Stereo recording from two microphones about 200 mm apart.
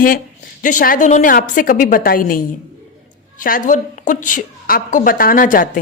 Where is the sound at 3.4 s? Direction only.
40° left (ahead or behind).